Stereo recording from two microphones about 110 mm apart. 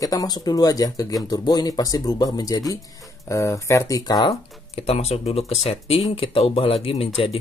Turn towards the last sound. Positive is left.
turn(degrees=60)  # may be behind; listen again after turning